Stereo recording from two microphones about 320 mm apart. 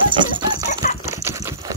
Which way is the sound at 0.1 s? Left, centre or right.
Centre.